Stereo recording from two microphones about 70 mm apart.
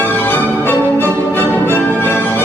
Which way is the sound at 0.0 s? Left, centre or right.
Left.